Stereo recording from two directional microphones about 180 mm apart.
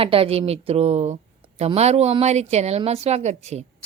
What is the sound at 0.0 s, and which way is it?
A woman's voice, 30° right (ahead or behind).